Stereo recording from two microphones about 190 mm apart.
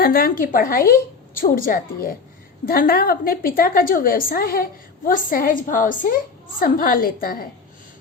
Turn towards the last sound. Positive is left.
turn(degrees=50)  # may be behind; listen again after turning